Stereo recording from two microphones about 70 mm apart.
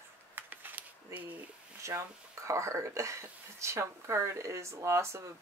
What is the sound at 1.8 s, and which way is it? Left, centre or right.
Speech, right.